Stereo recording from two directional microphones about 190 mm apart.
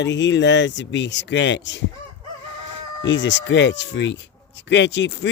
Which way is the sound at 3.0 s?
75° left (ahead or behind).